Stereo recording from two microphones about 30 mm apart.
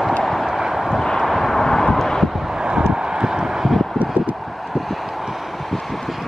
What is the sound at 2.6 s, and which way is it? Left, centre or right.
Vehicle, right.